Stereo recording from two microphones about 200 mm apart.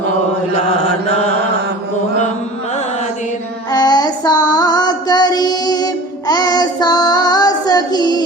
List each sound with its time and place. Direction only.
3.7 s child singing: 20° left (ahead or behind)